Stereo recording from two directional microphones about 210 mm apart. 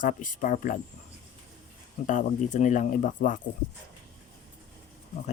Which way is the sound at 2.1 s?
40° left (ahead or behind).